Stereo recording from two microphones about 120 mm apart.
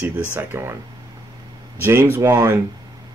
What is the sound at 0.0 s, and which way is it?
Speech, 15° right (ahead or behind).